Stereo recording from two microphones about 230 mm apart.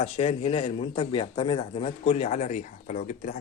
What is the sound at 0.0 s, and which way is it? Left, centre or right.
Speech, left.